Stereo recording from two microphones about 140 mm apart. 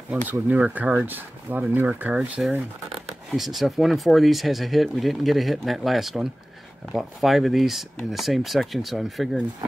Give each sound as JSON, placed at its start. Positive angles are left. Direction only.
{"t": 0.3, "sound": "speech", "side_deg": -10}